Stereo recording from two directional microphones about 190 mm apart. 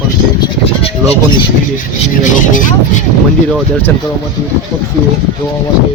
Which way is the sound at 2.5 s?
45° left (ahead or behind).